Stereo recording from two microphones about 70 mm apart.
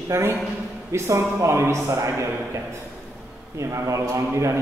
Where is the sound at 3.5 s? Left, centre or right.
Right.